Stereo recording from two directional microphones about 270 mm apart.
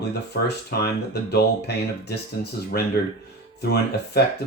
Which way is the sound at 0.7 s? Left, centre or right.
Left.